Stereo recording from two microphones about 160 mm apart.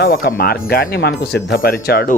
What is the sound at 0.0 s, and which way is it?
Speech, 70° left (ahead or behind).